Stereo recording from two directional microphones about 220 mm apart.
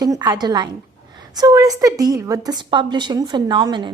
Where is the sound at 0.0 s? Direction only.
15° right (ahead or behind).